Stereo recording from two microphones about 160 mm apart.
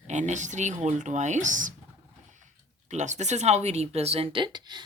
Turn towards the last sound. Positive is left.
turn(degrees=-30)  # may be behind; listen again after turning